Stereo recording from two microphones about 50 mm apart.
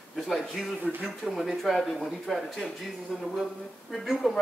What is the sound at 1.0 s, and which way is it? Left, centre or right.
Speech, centre.